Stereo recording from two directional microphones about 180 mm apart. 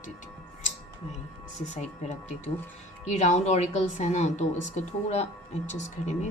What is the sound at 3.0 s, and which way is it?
A woman's voice, 40° left (ahead or behind).